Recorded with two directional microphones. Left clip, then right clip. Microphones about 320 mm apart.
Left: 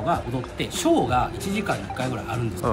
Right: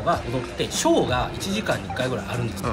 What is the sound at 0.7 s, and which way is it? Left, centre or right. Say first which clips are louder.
Speech: right 1 dB; centre.